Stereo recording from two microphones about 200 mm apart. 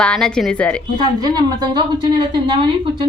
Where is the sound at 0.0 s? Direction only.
5° left (ahead or behind).